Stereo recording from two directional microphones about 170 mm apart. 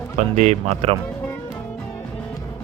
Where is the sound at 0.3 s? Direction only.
45° right (ahead or behind).